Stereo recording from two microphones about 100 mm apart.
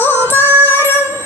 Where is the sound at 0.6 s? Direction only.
20° left (ahead or behind).